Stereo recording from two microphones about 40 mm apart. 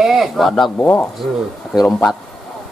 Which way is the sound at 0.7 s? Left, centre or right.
Left.